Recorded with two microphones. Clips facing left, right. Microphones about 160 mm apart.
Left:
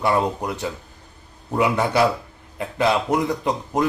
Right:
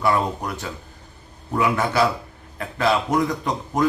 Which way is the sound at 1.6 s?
25° left (ahead or behind).